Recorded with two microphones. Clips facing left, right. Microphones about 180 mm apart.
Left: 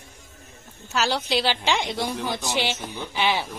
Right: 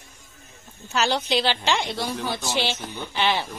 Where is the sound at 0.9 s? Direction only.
5° left (ahead or behind).